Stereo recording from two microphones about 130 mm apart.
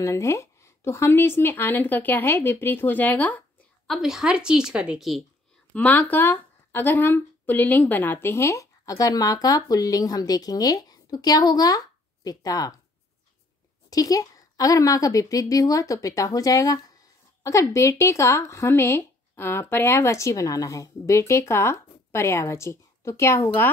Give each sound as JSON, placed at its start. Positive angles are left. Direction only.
{"t": 0.0, "sound": "speech", "side_deg": 25}
{"t": 3.9, "sound": "a woman's voice", "side_deg": -5}
{"t": 5.7, "sound": "speech", "side_deg": 10}
{"t": 13.8, "sound": "speech", "side_deg": 25}